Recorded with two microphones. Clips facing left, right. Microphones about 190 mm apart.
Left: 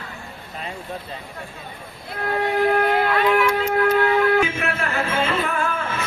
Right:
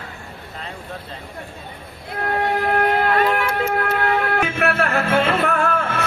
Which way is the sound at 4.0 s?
60° right (ahead or behind).